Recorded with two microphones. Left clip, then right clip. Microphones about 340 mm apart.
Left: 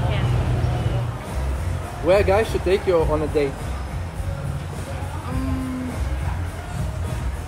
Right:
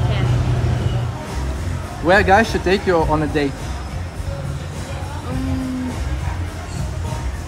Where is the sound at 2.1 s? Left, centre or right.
Right.